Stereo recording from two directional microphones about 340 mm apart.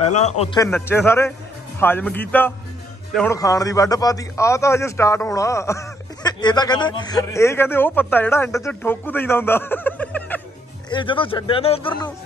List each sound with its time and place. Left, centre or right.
0.0 s a man's voice: centre
0.7 s a man's voice: centre